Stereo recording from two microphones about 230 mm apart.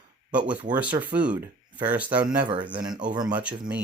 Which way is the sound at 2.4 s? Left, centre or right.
Centre.